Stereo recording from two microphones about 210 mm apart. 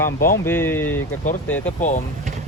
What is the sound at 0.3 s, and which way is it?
Speech, 10° left (ahead or behind).